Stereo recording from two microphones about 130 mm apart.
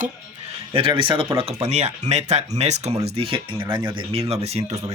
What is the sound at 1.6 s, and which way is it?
Speech, 60° right (ahead or behind).